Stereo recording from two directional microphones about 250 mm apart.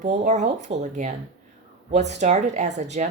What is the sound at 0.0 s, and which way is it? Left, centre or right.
Speech, right.